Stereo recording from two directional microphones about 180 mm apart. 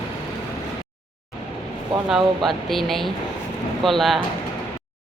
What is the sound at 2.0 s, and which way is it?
Speech, centre (ahead or behind).